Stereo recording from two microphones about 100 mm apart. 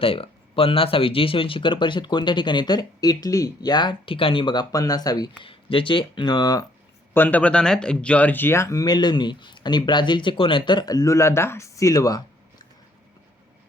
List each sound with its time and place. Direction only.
0.0 s speech: 65° left (ahead or behind)
4.7 s speech: 35° left (ahead or behind)
5.4 s speech: 60° left (ahead or behind); by 6.7 s 40° left (ahead or behind)
7.1 s speech: 20° left (ahead or behind); by 12.2 s 35° left (ahead or behind)